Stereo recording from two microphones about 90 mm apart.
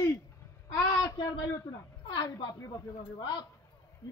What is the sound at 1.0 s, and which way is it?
Speech, 40° left (ahead or behind).